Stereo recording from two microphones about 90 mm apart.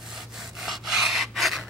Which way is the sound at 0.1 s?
5° right (ahead or behind).